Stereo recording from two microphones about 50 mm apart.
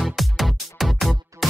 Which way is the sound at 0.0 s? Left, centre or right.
Centre.